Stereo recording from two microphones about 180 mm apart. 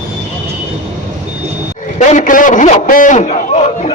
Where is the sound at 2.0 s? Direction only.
45° left (ahead or behind).